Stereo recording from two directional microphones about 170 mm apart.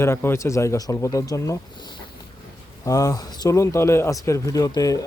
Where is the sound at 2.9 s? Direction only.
20° left (ahead or behind).